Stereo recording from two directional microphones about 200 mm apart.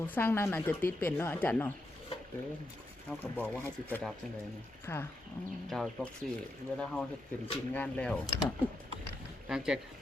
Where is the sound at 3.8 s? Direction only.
10° left (ahead or behind).